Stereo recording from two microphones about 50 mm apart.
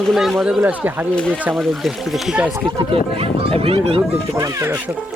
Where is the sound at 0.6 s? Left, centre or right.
Right.